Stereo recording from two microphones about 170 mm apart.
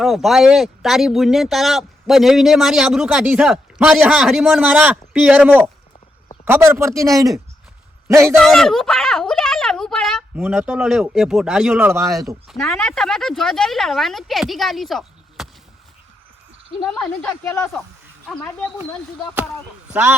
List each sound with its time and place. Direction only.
0.0 s a man's voice: centre (ahead or behind)
8.4 s speech: centre (ahead or behind)
11.9 s speech: 15° right (ahead or behind)
12.5 s speech: centre (ahead or behind)
16.8 s speech: centre (ahead or behind)
19.9 s speech: 10° right (ahead or behind)